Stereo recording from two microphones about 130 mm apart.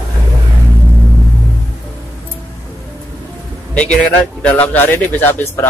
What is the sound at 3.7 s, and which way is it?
A man's voice, 10° left (ahead or behind).